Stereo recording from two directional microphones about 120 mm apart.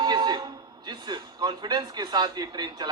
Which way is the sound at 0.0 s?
40° right (ahead or behind).